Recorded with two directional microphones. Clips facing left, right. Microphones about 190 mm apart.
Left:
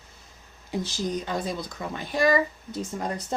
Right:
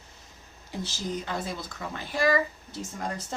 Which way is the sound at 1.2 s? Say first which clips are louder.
Left 4 dB; 20° left (ahead or behind).